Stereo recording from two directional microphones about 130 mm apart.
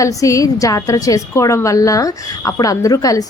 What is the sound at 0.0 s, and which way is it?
A woman's voice, 25° left (ahead or behind).